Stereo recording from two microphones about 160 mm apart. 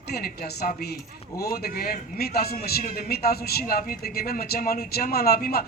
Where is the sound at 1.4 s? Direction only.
75° left (ahead or behind).